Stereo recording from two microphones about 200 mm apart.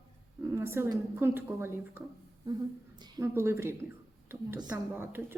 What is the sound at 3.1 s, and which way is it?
A woman's voice, 15° right (ahead or behind).